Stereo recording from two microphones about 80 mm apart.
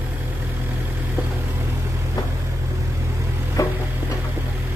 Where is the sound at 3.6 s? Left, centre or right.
Left.